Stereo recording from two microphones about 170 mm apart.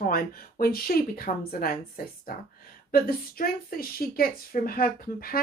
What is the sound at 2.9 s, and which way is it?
Speech, 60° left (ahead or behind).